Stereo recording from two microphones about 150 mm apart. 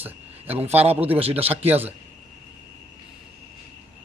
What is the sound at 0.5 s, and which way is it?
Speech, 45° right (ahead or behind).